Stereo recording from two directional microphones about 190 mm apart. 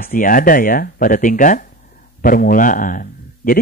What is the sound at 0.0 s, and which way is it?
Speech, 45° left (ahead or behind).